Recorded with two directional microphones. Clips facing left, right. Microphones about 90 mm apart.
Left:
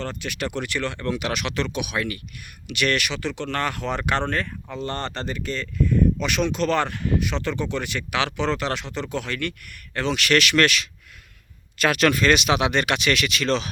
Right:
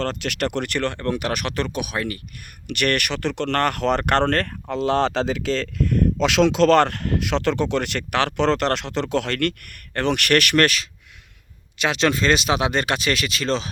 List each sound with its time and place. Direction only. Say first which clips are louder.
0.0 s speech: right 5 dB; 80° right; by 0.9 s 60° right (ahead or behind)
0.9 s speech: right 2 dB; 50° right (ahead or behind)
2.6 s speech: right 2 dB; 50° right (ahead or behind)
11.8 s speech: left 1 dB; 25° right (ahead or behind)